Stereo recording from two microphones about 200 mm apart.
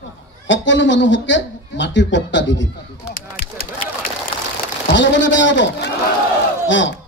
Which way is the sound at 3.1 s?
45° left (ahead or behind).